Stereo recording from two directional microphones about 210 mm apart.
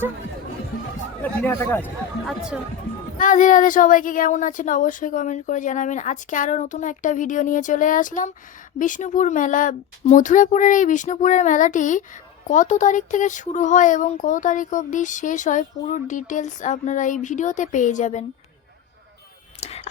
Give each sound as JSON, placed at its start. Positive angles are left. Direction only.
{"t": 1.2, "sound": "speech", "side_deg": 10}
{"t": 3.2, "sound": "speech", "side_deg": 40}
{"t": 19.5, "sound": "a sound", "side_deg": 30}